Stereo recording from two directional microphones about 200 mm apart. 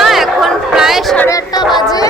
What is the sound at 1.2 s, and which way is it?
Music, 20° left (ahead or behind).